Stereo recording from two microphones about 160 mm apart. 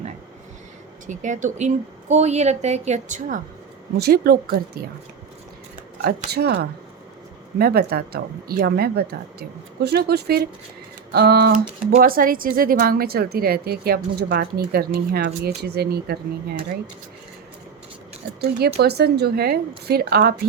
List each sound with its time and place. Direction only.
1.0 s a woman's voice: 50° right (ahead or behind)
3.9 s speech: 80° right
6.0 s a woman's voice: 80° right
11.5 s speech: 60° right (ahead or behind); by 16.1 s 80° right
18.8 s a woman's voice: 85° right